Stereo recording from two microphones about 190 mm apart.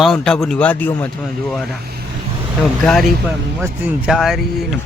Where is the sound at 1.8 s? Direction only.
55° right (ahead or behind).